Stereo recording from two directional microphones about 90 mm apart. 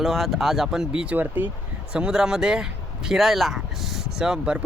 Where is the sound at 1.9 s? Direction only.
10° right (ahead or behind).